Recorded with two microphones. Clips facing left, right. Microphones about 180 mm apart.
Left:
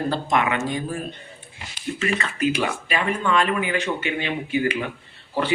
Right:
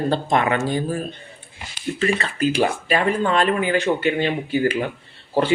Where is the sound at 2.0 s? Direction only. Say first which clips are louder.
Right 3 dB; 35° right (ahead or behind).